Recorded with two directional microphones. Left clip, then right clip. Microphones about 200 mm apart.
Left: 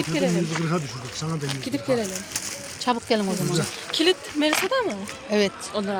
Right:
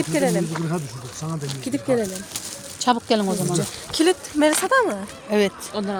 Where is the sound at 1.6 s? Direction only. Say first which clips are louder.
Right 3 dB; 40° right (ahead or behind).